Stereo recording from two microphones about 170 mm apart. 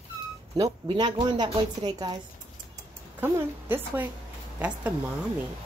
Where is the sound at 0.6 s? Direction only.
25° right (ahead or behind).